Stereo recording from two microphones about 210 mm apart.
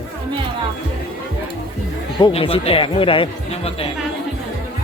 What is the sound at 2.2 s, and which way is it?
Speech, 25° left (ahead or behind).